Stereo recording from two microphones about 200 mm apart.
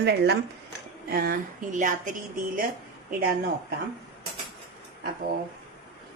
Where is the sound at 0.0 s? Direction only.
55° right (ahead or behind).